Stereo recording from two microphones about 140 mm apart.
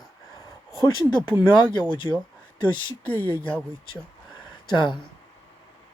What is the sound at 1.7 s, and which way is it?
Speech, 35° left (ahead or behind).